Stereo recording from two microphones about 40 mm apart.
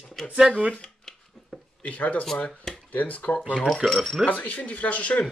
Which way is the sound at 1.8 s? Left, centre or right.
Left.